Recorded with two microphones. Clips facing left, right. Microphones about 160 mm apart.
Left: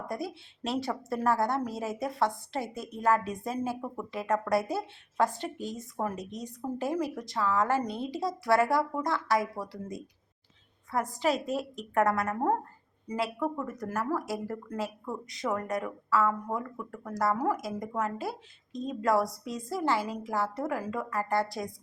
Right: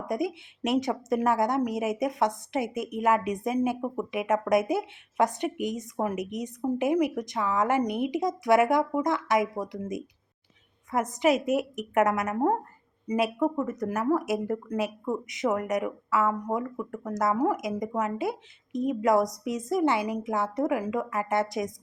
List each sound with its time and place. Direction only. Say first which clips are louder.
0.1 s a woman's voice: right 9 dB; 20° right (ahead or behind)